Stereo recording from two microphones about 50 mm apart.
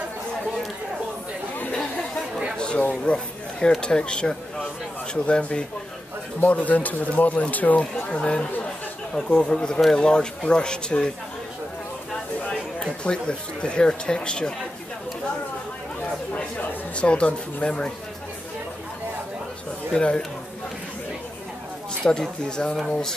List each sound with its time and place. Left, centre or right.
3.1 s speech: centre
6.4 s speech: left
7.8 s speech: centre
13.0 s speech: centre
16.3 s speech: left
19.9 s speech: left
22.0 s speech: centre